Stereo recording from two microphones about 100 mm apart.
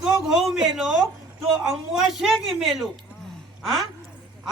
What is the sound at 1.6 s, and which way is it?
A woman's voice, 5° right (ahead or behind).